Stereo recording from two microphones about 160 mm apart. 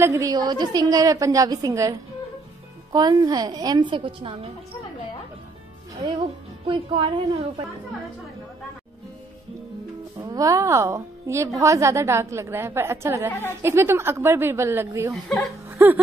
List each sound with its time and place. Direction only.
0.0 s a woman's voice: 20° right (ahead or behind)
5.9 s a woman's voice: 30° right (ahead or behind)
10.1 s a woman's voice: 25° right (ahead or behind)
15.2 s speech: centre (ahead or behind)
15.8 s a woman's voice: 10° right (ahead or behind)